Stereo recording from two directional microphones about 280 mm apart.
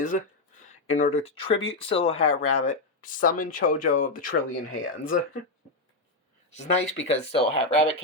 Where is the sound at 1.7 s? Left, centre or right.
Centre.